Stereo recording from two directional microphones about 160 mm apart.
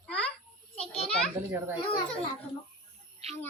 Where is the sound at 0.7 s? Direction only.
40° left (ahead or behind).